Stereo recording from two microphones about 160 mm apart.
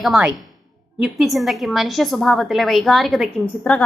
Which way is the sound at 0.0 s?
5° right (ahead or behind).